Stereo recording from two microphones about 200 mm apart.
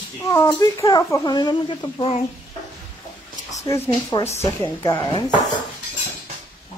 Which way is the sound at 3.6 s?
15° left (ahead or behind).